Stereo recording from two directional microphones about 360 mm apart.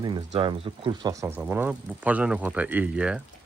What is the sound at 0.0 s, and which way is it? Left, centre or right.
Speech, centre.